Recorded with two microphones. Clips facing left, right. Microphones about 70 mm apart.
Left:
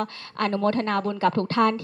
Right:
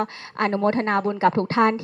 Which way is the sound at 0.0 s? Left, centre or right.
Right.